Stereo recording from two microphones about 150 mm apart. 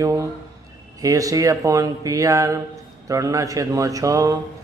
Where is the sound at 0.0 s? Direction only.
20° right (ahead or behind).